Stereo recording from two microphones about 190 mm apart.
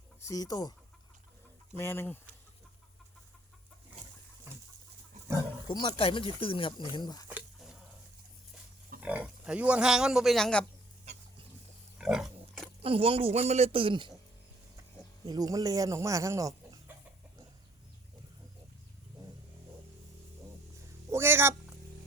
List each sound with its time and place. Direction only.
0.2 s speech: 15° left (ahead or behind)
1.7 s speech: 10° left (ahead or behind)
5.6 s speech: 25° left (ahead or behind)
7.3 s a sound: 5° right (ahead or behind)
9.0 s speech: 5° right (ahead or behind)
11.9 s pig: 5° right (ahead or behind)
12.8 s a man's voice: 30° right (ahead or behind)
15.3 s speech: 20° right (ahead or behind)
21.1 s a sound: 10° right (ahead or behind)